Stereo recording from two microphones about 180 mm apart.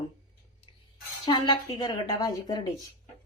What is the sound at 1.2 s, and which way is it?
Speech, 25° left (ahead or behind).